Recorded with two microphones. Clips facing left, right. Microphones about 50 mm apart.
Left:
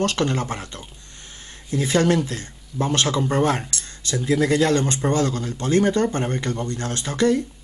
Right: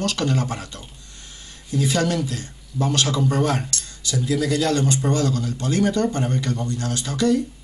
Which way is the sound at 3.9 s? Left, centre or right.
Left.